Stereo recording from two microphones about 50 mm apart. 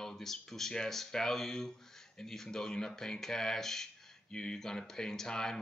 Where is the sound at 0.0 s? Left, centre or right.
Centre.